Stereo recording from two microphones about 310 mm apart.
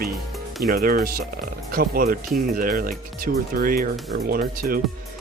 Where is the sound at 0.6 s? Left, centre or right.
Right.